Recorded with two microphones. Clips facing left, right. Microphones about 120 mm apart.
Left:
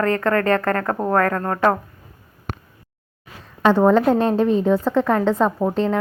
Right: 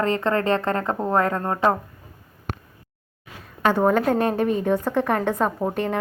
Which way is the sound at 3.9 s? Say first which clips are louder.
Left 4 dB; 25° left (ahead or behind).